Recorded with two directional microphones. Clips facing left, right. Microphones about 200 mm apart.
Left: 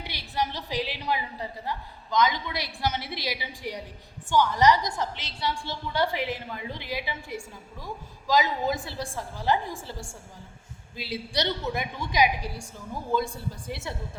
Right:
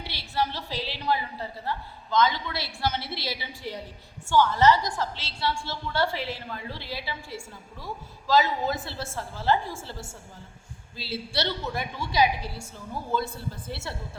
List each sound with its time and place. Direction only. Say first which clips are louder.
0.0 s a woman's voice: right 1 dB; 15° left (ahead or behind)